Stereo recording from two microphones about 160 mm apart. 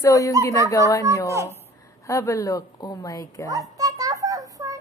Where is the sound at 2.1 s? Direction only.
20° left (ahead or behind).